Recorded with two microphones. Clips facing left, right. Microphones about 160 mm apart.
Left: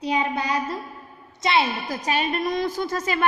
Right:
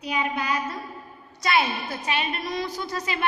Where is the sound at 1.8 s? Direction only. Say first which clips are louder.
Left 3 dB; 40° left (ahead or behind).